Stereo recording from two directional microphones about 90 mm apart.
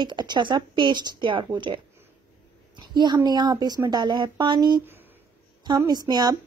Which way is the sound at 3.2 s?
50° right (ahead or behind).